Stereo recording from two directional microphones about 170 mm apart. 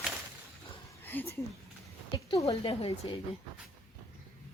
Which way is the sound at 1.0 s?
10° left (ahead or behind).